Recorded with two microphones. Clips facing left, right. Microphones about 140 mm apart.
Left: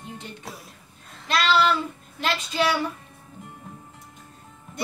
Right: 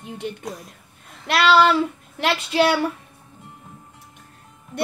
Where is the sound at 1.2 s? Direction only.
70° right (ahead or behind).